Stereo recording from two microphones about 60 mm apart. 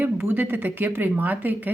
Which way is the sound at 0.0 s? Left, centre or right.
Right.